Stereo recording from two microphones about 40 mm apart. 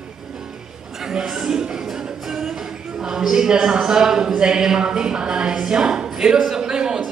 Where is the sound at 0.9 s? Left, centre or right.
Centre.